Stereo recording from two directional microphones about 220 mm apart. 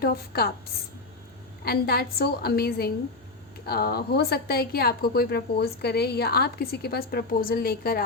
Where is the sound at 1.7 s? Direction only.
45° left (ahead or behind).